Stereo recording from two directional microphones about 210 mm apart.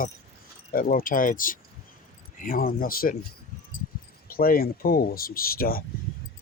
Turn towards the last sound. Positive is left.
turn(degrees=45)  # may be behind; listen again after turning